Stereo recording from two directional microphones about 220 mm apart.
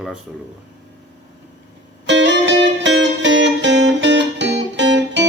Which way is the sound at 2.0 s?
55° right (ahead or behind).